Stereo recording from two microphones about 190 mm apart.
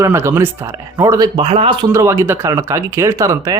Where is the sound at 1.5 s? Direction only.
30° right (ahead or behind).